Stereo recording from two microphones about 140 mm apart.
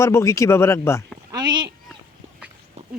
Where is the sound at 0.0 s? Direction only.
20° left (ahead or behind).